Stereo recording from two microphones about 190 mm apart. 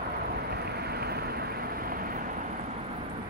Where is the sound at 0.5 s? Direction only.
55° right (ahead or behind).